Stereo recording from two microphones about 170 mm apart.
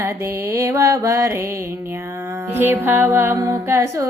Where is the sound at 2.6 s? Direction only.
10° right (ahead or behind).